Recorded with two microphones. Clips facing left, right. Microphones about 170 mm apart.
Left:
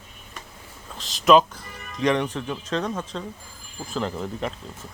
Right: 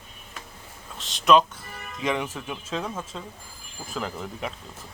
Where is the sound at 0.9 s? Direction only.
Centre (ahead or behind).